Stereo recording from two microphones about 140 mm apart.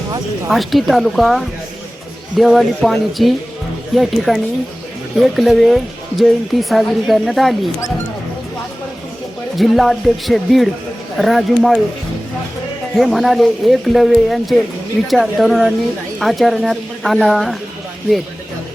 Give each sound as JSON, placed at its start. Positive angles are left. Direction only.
{"t": 0.5, "sound": "speech", "side_deg": 0}
{"t": 9.6, "sound": "speech", "side_deg": 0}
{"t": 13.0, "sound": "speech", "side_deg": 0}